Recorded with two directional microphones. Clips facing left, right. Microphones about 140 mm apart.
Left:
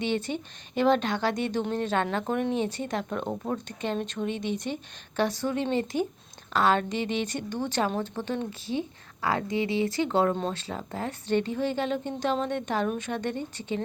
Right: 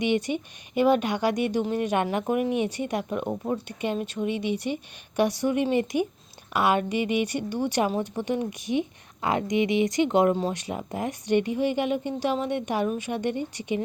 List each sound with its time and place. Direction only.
0.0 s speech: 15° right (ahead or behind)